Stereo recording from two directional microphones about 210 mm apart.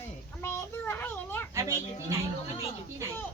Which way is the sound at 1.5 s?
15° right (ahead or behind).